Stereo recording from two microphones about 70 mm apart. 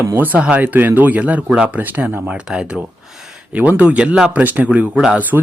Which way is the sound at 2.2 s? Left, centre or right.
Centre.